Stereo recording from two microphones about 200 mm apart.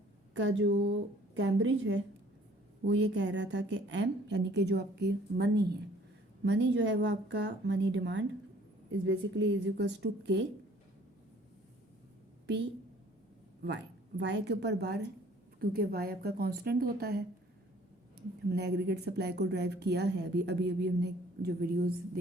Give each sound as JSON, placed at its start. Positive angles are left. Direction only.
{"t": 0.3, "sound": "a woman's voice", "side_deg": -65}
{"t": 14.2, "sound": "a woman's voice", "side_deg": -60}
{"t": 18.4, "sound": "a woman's voice", "side_deg": -55}